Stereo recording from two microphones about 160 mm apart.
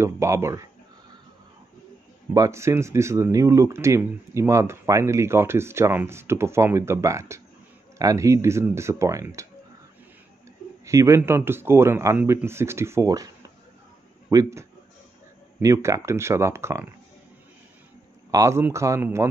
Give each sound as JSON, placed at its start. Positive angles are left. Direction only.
{"t": 0.0, "sound": "speech", "side_deg": -15}
{"t": 2.3, "sound": "speech", "side_deg": -20}
{"t": 10.9, "sound": "speech", "side_deg": -20}
{"t": 14.3, "sound": "speech", "side_deg": -20}
{"t": 18.3, "sound": "speech", "side_deg": -20}